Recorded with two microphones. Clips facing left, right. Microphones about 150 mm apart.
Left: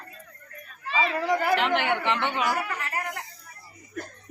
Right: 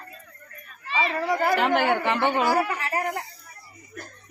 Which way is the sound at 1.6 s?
40° right (ahead or behind).